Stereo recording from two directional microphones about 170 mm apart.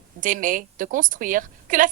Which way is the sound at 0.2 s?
50° right (ahead or behind).